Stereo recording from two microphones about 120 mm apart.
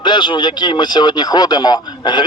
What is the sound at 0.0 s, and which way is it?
Speech, 40° left (ahead or behind).